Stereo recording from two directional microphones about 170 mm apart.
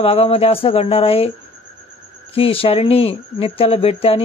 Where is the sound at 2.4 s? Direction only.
35° left (ahead or behind).